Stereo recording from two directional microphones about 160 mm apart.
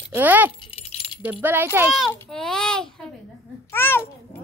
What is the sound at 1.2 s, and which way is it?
Speech, 10° right (ahead or behind).